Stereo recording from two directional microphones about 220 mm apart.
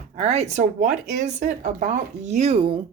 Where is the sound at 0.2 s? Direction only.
30° right (ahead or behind).